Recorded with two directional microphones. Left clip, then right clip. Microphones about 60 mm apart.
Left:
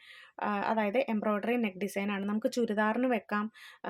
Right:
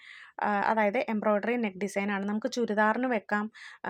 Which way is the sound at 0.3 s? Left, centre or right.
Right.